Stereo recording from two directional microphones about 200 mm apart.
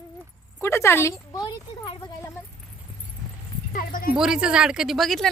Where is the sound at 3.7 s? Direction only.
45° left (ahead or behind).